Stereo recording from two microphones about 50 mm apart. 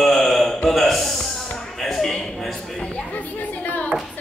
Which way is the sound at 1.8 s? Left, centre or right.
Centre.